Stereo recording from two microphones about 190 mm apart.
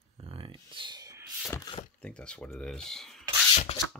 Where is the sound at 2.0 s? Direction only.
5° left (ahead or behind).